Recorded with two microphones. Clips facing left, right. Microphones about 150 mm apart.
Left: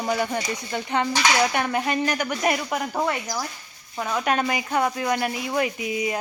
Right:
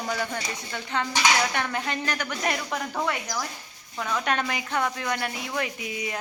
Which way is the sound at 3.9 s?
20° left (ahead or behind).